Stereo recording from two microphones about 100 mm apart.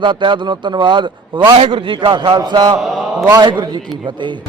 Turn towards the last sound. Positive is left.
turn(degrees=-50)  # may be behind; listen again after turning